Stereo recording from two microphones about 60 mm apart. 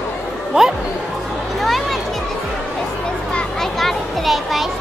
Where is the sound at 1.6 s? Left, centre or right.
Centre.